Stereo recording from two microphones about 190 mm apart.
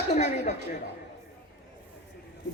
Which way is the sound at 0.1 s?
40° left (ahead or behind).